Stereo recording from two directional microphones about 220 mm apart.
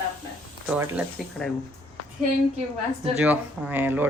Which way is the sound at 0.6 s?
5° right (ahead or behind).